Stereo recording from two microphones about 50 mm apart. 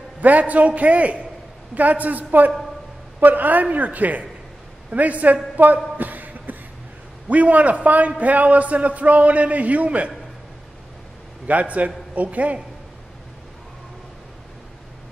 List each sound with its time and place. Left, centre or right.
0.2 s a man's voice: right
5.9 s a sound: right
7.2 s a man's voice: right
11.4 s a man's voice: right